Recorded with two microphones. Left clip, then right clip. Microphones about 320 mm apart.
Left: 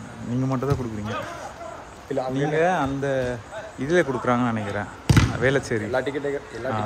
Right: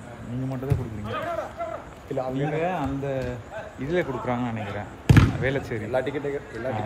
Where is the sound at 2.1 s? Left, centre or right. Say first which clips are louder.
Left 4 dB; left.